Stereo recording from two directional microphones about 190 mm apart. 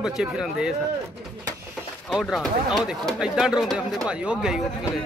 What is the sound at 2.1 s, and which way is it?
Speech, centre (ahead or behind).